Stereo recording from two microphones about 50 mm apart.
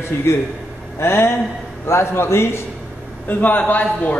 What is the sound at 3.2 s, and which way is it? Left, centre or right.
Speech, left.